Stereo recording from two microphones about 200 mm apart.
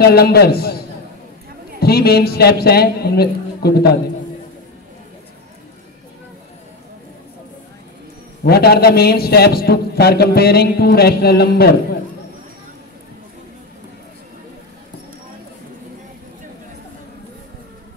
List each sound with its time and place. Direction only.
0.0 s a man's voice: 50° left (ahead or behind)
1.8 s a man's voice: 50° left (ahead or behind)
8.5 s a man's voice: 50° left (ahead or behind)